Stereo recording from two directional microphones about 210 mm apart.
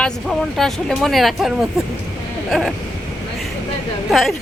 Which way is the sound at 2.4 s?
Centre (ahead or behind).